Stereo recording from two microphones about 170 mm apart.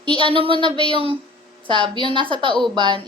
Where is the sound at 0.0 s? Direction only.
30° right (ahead or behind).